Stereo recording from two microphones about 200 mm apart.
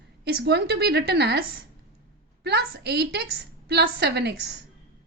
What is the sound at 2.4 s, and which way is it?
A woman's voice, 55° right (ahead or behind).